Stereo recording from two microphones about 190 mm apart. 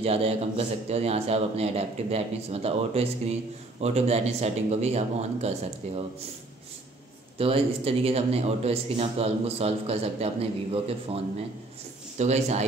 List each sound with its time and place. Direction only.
0.0 s speech: 30° right (ahead or behind)
7.3 s speech: 30° right (ahead or behind)